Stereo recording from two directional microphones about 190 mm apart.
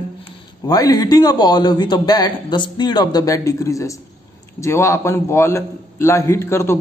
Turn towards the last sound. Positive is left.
turn(degrees=15)  # may be behind; listen again after turning